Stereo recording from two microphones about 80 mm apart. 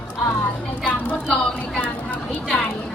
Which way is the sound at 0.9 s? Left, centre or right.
Centre.